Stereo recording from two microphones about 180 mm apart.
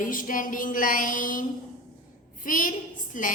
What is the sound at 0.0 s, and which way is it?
A woman's voice, 50° left (ahead or behind).